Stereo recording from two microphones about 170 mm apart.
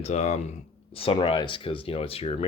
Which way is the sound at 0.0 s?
40° left (ahead or behind).